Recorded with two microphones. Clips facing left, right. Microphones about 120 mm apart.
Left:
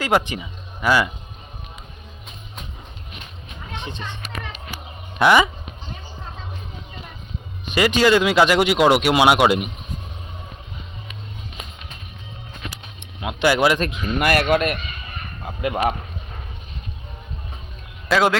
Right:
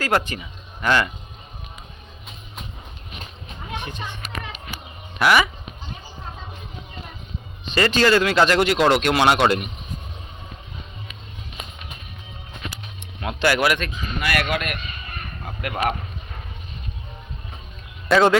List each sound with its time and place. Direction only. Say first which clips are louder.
0.0 s speech: left 2 dB; 15° left (ahead or behind)
5.2 s speech: left 3 dB; 20° left (ahead or behind)
7.6 s speech: left 1 dB; 10° left (ahead or behind)
13.0 s a sound: left 1 dB; 15° left (ahead or behind)
13.9 s speech: left 6 dB; 55° left (ahead or behind)
14.3 s a man's voice: left 5 dB; 40° left (ahead or behind)
15.4 s speech: left 3 dB; 15° left (ahead or behind)
18.1 s speech: right 2 dB; centre (ahead or behind)